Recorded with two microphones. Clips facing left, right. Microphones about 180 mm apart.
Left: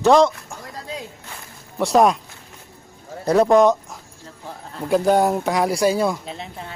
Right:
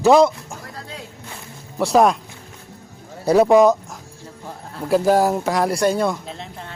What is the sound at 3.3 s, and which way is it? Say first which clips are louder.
Speech: right 2 dB; 5° right (ahead or behind).